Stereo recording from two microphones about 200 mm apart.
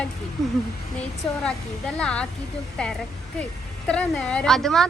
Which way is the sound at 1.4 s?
5° left (ahead or behind).